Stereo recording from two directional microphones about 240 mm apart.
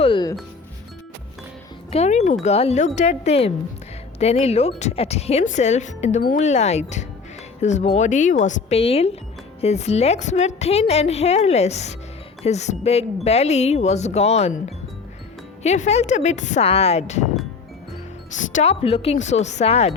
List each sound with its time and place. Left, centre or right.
0.0 s speech: centre
1.9 s speech: left
15.6 s speech: left
18.5 s speech: left